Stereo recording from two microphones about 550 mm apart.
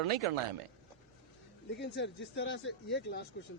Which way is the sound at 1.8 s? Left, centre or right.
Centre.